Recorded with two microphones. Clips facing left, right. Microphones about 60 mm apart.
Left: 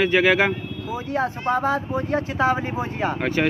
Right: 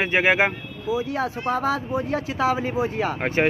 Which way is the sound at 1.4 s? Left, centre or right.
Left.